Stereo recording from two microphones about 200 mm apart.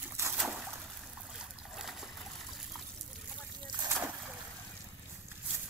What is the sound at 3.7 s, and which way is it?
Splash, 20° right (ahead or behind).